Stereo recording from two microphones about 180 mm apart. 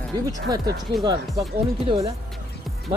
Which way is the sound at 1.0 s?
25° right (ahead or behind).